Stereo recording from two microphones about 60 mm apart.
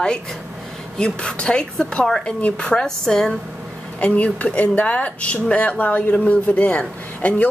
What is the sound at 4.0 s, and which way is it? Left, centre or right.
Speech, left.